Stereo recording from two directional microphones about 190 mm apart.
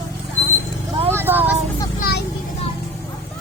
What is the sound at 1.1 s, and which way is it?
Vehicle, 10° right (ahead or behind).